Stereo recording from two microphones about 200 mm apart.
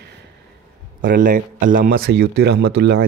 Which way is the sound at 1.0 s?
45° right (ahead or behind).